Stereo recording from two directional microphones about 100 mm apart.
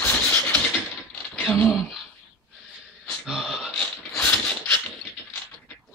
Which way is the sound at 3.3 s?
10° right (ahead or behind).